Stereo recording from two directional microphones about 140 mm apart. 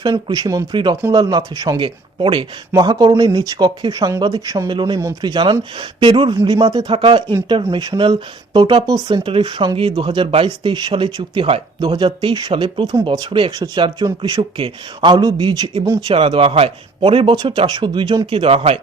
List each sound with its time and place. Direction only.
0.1 s speech: 30° right (ahead or behind)
1.8 s speech: 40° right (ahead or behind)
3.4 s speech: 25° right (ahead or behind)
16.1 s speech: 35° right (ahead or behind)